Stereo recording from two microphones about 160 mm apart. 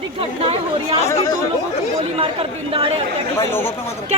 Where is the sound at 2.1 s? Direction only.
35° right (ahead or behind).